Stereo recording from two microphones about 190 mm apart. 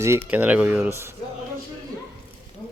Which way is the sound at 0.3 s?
5° right (ahead or behind).